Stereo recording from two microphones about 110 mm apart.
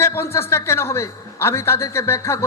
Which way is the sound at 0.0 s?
25° left (ahead or behind).